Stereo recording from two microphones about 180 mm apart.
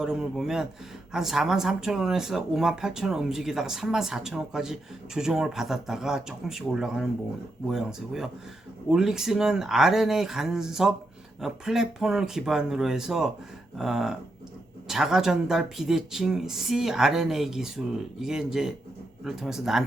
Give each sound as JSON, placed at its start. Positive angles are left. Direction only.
{"t": 0.0, "sound": "speech", "side_deg": -5}